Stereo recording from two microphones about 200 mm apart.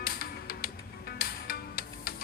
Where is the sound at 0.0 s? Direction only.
45° left (ahead or behind).